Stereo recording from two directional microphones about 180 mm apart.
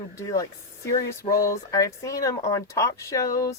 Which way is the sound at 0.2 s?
20° left (ahead or behind).